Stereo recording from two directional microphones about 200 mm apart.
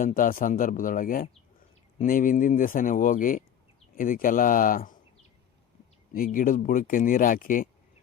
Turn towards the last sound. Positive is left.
turn(degrees=45)  # may be behind; listen again after turning